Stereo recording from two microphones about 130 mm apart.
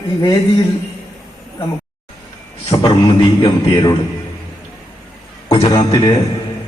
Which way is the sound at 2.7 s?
35° left (ahead or behind).